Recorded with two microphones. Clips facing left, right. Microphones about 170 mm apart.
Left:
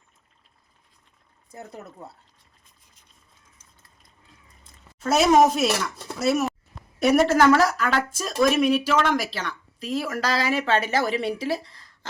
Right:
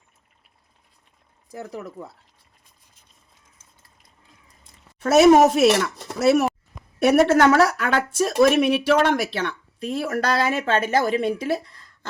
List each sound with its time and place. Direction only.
1.5 s speech: 90° right
5.5 s speech: 65° right (ahead or behind)